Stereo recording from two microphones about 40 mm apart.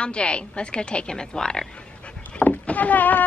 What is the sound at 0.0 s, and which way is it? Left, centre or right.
A woman's voice, left.